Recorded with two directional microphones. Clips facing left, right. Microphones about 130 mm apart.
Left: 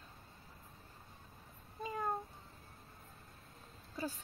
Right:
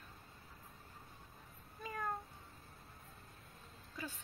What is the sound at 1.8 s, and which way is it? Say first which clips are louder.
Meow: left 4 dB; 25° left (ahead or behind).